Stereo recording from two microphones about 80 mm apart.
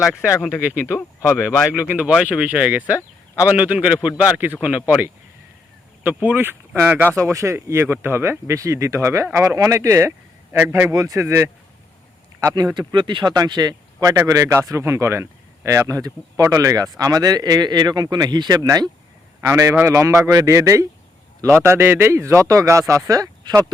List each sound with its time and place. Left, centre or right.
0.0 s speech: centre
0.9 s speech: left
1.9 s speech: centre
6.2 s speech: right
7.2 s speech: right
10.9 s speech: right
12.4 s speech: right
12.9 s speech: right
13.3 s speech: right
19.5 s speech: right
21.6 s speech: right